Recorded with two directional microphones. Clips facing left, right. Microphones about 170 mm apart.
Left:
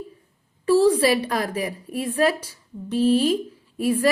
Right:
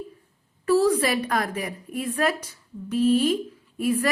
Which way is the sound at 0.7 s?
30° left (ahead or behind).